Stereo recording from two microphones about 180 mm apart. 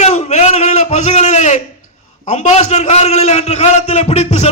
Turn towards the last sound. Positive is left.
turn(degrees=35)  # may be behind; listen again after turning